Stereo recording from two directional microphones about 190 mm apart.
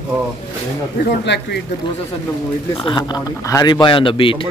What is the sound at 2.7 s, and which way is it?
A man's voice, 25° left (ahead or behind).